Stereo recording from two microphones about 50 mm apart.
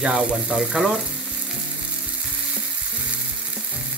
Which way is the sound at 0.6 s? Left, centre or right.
Centre.